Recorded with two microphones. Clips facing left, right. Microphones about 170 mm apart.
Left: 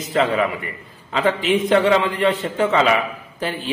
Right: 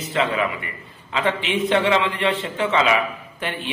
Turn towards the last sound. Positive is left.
turn(degrees=35)  # may be behind; listen again after turning